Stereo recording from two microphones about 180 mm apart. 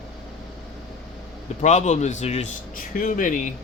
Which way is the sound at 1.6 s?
40° left (ahead or behind).